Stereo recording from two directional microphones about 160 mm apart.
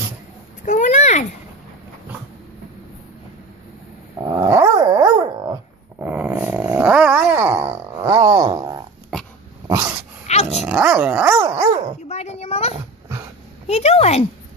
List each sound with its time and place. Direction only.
0.7 s a sound: 50° left (ahead or behind)
4.3 s dog: 20° right (ahead or behind)
6.0 s dog: 10° right (ahead or behind); by 8.8 s 25° right (ahead or behind)
9.7 s dog: 15° right (ahead or behind)
10.5 s dog: 5° right (ahead or behind)
11.3 s dog: 20° right (ahead or behind)
12.1 s a sound: 40° left (ahead or behind)